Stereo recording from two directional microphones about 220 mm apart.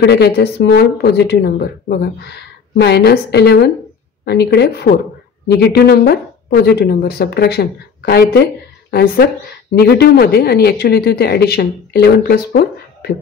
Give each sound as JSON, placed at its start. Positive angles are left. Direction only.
{"t": 0.0, "sound": "speech", "side_deg": 50}